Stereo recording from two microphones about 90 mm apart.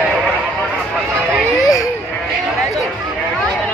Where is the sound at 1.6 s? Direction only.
40° left (ahead or behind).